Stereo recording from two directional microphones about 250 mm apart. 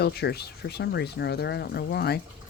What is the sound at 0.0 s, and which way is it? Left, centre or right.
Speech, left.